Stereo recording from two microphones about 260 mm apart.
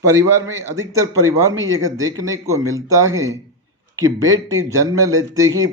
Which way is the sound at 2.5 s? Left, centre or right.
Right.